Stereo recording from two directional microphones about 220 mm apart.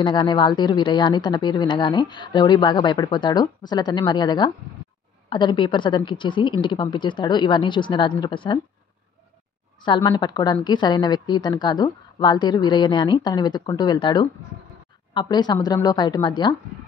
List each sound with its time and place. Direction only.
0.0 s speech: 20° left (ahead or behind)
9.8 s speech: 20° left (ahead or behind)